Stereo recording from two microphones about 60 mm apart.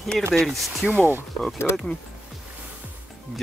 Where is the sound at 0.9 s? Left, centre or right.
Right.